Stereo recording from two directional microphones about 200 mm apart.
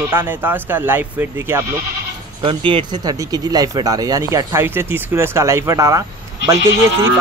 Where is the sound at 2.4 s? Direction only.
25° right (ahead or behind).